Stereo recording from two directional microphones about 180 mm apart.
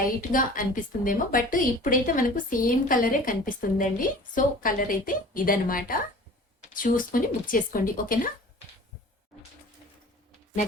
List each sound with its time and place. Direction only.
0.0 s a woman's voice: 50° left (ahead or behind)